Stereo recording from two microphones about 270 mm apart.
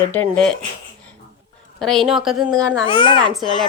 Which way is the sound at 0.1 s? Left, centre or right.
Centre.